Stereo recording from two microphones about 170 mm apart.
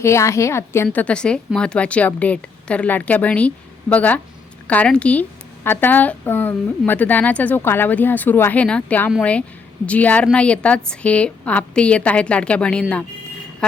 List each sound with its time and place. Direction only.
0.0 s a woman's voice: 15° left (ahead or behind)